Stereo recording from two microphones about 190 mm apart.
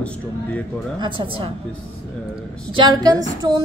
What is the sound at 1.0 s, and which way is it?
Speech, 25° right (ahead or behind).